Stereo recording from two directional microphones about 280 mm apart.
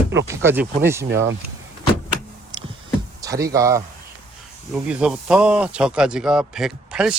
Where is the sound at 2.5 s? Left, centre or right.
Centre.